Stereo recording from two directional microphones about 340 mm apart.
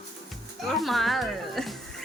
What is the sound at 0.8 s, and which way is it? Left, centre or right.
Speech, centre.